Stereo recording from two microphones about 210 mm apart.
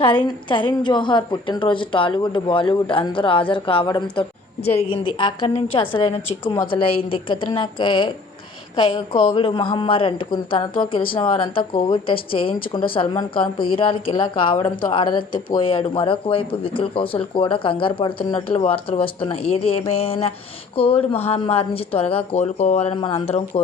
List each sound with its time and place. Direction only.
0.0 s speech: 25° left (ahead or behind)